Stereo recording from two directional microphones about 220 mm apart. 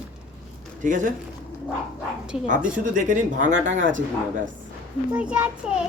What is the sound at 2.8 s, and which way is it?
Speech, 35° right (ahead or behind).